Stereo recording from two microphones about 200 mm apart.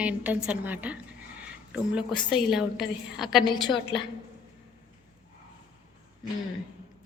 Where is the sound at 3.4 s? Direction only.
20° left (ahead or behind).